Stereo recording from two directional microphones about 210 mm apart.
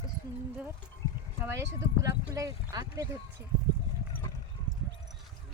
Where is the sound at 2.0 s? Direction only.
15° right (ahead or behind).